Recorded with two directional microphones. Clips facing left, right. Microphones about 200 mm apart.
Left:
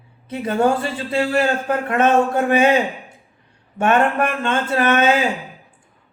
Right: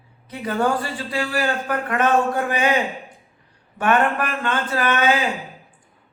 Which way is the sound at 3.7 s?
25° left (ahead or behind).